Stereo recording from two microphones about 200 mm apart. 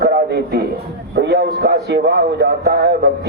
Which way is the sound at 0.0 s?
55° right (ahead or behind).